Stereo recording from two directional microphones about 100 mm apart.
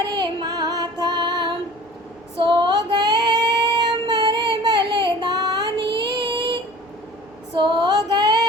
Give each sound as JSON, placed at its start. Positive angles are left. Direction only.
{"t": 0.1, "sound": "music", "side_deg": -45}
{"t": 2.4, "sound": "female singing", "side_deg": -55}